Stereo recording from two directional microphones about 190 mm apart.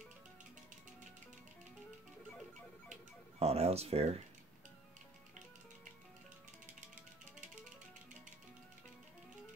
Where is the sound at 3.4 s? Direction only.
30° right (ahead or behind).